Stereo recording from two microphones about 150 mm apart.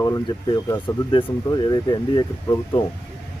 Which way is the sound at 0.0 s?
25° left (ahead or behind).